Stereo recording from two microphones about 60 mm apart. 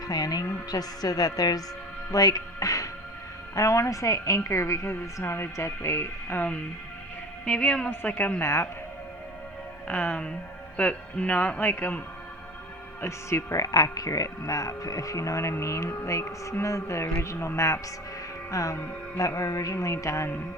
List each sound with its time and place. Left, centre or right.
0.1 s a woman's voice: left
3.5 s speech: left
5.2 s speech: left
7.4 s speech: centre
7.9 s speech: left
8.4 s speech: left
9.8 s speech: left
11.6 s a man's voice: left
13.0 s speech: left
13.6 s speech: left
18.5 s speech: left
19.4 s speech: left